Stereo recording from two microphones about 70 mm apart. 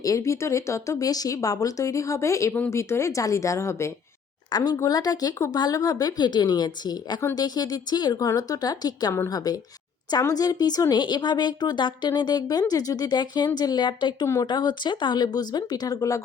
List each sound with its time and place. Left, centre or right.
0.0 s speech: left
4.5 s speech: left
4.8 s a woman's voice: left